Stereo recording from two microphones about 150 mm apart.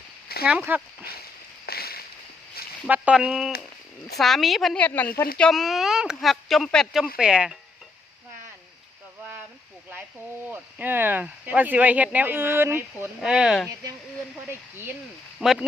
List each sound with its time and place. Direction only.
0.4 s speech: 10° right (ahead or behind)
1.0 s a sound: 90° left
2.8 s speech: 10° right (ahead or behind); by 5.3 s 15° left (ahead or behind)
5.4 s speech: centre (ahead or behind)
10.5 s speech: 15° right (ahead or behind)
13.1 s speech: 5° right (ahead or behind)
14.4 s speech: 15° right (ahead or behind)